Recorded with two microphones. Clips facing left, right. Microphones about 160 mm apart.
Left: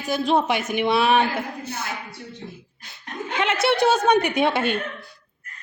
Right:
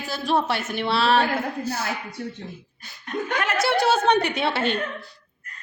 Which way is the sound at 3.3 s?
25° left (ahead or behind).